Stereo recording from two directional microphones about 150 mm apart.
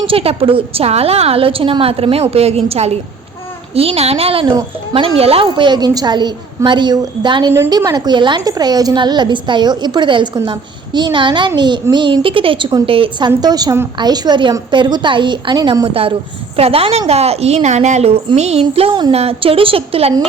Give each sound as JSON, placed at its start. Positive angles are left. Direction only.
{"t": 0.1, "sound": "a woman's voice", "side_deg": -40}
{"t": 7.5, "sound": "a woman's voice", "side_deg": -20}
{"t": 15.9, "sound": "a woman's voice", "side_deg": -40}